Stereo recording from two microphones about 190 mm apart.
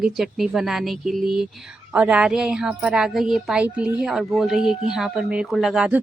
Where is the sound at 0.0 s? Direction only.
Centre (ahead or behind).